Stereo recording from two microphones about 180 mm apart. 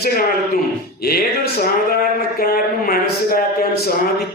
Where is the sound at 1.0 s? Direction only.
60° left (ahead or behind).